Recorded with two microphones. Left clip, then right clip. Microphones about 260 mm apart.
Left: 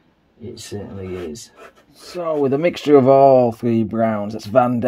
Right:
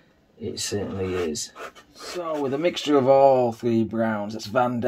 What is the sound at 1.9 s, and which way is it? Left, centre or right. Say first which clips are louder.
Speech: left 7 dB; left.